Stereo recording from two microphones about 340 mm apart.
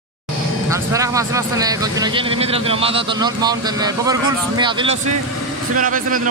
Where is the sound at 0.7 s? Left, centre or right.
Centre.